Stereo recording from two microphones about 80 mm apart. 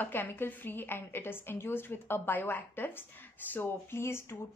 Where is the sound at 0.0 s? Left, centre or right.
Left.